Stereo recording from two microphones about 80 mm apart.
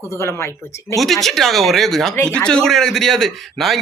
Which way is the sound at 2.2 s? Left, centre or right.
Centre.